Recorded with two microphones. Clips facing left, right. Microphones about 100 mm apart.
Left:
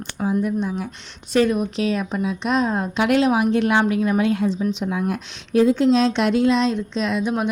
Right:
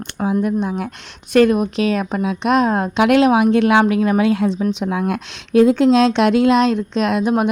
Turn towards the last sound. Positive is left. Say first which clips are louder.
# right 5 dB
turn(degrees=-55)  # may be behind; listen again after turning